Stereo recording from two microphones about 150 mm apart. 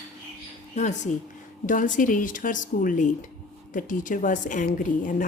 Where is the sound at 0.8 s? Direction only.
50° left (ahead or behind).